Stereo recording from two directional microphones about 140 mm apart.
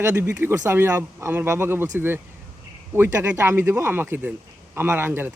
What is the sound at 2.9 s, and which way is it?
Speech, 15° right (ahead or behind).